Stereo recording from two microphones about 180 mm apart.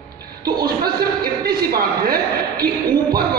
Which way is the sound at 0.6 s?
60° right (ahead or behind).